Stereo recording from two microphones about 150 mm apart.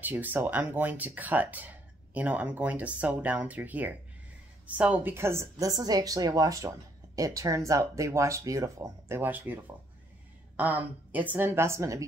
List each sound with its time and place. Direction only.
0.0 s speech: 10° right (ahead or behind)